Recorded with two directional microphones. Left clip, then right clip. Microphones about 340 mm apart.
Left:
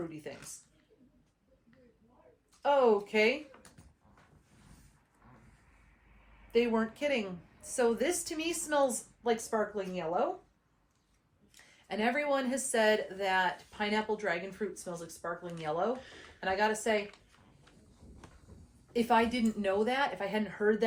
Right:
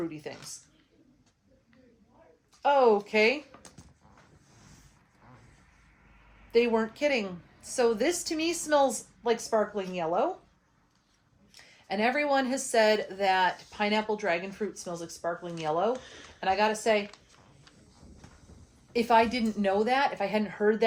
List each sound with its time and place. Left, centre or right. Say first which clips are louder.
0.1 s speech: right 4 dB; right
2.6 s speech: right 4 dB; right
6.5 s speech: right 5 dB; right
11.5 s speech: right 5 dB; right
18.9 s speech: right 5 dB; right